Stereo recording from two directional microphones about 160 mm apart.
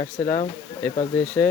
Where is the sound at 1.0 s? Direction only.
10° left (ahead or behind).